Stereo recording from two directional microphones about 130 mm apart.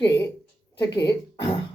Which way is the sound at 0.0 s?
20° left (ahead or behind).